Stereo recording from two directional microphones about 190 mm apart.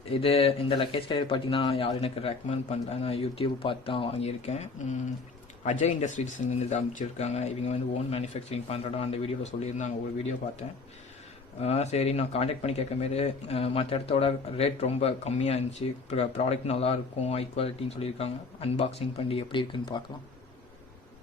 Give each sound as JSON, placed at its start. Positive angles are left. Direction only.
{"t": 0.0, "sound": "speech", "side_deg": 30}